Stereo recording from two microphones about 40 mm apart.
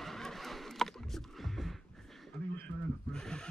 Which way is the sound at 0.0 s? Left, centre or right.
Centre.